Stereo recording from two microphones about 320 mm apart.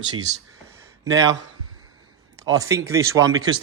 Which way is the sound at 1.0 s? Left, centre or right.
Centre.